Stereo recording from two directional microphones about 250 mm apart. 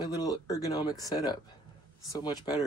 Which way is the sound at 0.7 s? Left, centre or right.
Centre.